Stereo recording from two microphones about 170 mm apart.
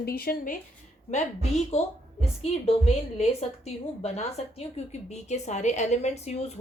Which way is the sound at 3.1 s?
40° left (ahead or behind).